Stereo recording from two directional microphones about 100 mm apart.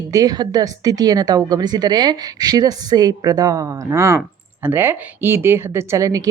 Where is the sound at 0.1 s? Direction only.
40° right (ahead or behind).